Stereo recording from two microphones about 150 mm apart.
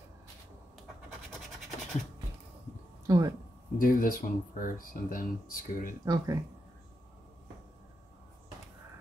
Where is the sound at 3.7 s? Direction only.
65° left (ahead or behind).